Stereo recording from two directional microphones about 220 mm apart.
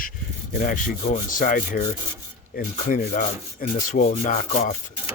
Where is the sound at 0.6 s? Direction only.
35° left (ahead or behind).